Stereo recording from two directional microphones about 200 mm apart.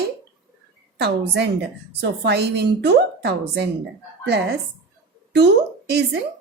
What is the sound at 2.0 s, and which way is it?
A woman's voice, 55° right (ahead or behind).